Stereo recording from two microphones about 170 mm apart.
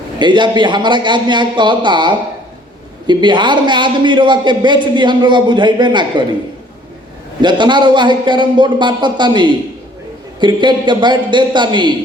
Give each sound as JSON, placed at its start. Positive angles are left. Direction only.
{"t": 0.2, "sound": "a man's voice", "side_deg": -25}
{"t": 7.4, "sound": "a man's voice", "side_deg": -25}